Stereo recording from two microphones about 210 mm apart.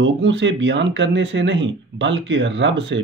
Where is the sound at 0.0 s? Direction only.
60° right (ahead or behind).